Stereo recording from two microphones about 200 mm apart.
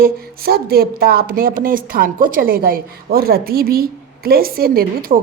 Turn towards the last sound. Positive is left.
turn(degrees=-45)  # may be behind; listen again after turning